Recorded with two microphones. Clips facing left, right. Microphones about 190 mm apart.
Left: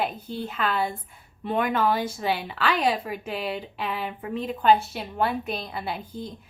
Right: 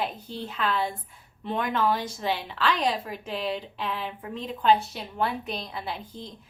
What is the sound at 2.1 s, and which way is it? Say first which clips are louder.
Speech: left 2 dB; 5° left (ahead or behind).